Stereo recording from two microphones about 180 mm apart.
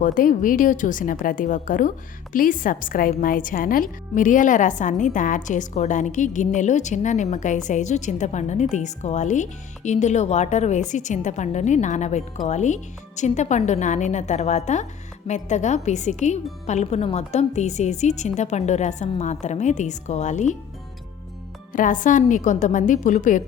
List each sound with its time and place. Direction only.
0.0 s speech: 50° left (ahead or behind)
21.7 s speech: 45° left (ahead or behind)